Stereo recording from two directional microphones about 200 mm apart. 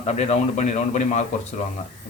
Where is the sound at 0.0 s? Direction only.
35° left (ahead or behind).